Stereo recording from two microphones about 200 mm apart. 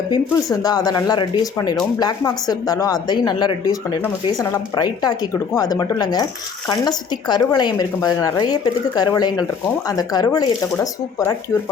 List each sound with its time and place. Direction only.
0.5 s speech: 20° left (ahead or behind)